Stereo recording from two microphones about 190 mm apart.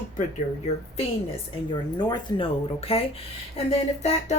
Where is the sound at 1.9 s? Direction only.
20° left (ahead or behind).